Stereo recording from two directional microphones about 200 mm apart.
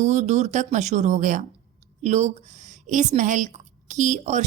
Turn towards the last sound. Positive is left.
turn(degrees=-35)  # may be behind; listen again after turning